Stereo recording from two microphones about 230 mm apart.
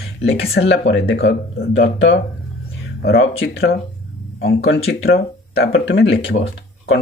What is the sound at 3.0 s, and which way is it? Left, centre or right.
Speech, left.